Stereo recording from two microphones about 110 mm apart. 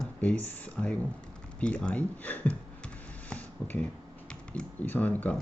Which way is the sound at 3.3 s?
15° left (ahead or behind).